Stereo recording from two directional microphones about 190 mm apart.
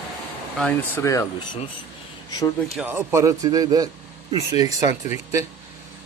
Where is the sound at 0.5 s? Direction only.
5° left (ahead or behind).